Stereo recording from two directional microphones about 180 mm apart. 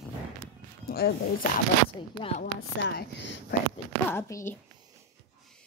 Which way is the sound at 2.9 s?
75° left (ahead or behind).